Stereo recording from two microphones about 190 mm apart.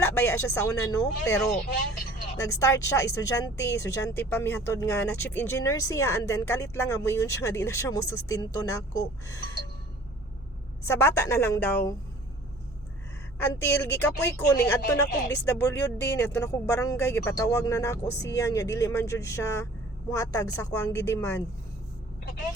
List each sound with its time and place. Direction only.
0.0 s speech: 15° left (ahead or behind)
2.5 s speech: 15° left (ahead or behind)
10.8 s speech: 15° left (ahead or behind)
13.4 s speech: 15° left (ahead or behind)